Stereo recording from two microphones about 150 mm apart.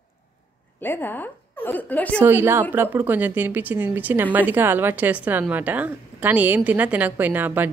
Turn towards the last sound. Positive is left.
turn(degrees=-10)  # may be behind; listen again after turning